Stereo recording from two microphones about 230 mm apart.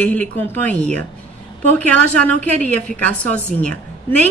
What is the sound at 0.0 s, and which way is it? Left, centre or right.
Speech, centre.